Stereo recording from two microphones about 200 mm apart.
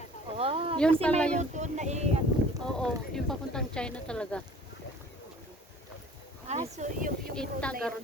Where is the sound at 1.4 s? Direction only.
35° right (ahead or behind).